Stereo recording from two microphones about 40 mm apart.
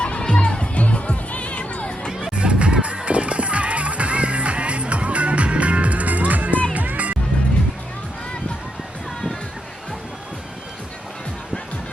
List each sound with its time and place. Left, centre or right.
0.0 s music: left
2.3 s music: right